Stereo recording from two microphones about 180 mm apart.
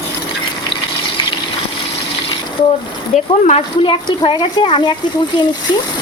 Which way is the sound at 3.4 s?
35° left (ahead or behind).